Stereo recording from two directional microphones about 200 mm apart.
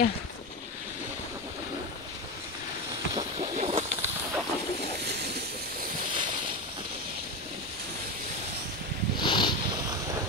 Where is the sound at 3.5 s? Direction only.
35° right (ahead or behind).